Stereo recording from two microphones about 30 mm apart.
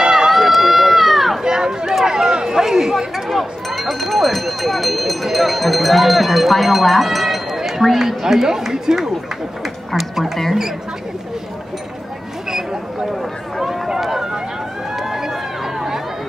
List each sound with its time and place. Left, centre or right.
0.1 s run: centre
1.4 s a sound: right
3.3 s speech: centre
13.6 s run: centre